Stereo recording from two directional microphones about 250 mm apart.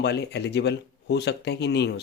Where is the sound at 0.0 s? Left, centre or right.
Left.